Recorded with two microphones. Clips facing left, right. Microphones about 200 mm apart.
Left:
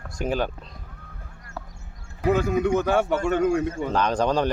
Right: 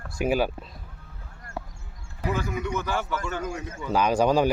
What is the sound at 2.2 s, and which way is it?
Speech, 50° left (ahead or behind).